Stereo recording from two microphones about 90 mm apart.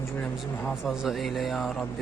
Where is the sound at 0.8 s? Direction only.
5° right (ahead or behind).